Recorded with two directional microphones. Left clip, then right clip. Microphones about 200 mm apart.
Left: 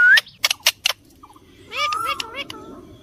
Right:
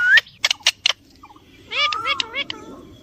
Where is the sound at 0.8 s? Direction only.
20° right (ahead or behind).